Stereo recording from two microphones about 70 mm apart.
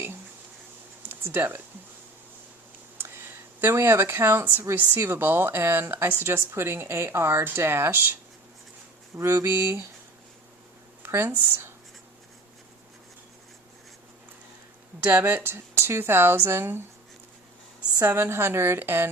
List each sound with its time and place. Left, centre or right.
1.0 s speech: right
3.0 s speech: right
9.1 s speech: right
11.0 s a sound: right
11.3 s speech: right
15.1 s speech: right
18.0 s speech: right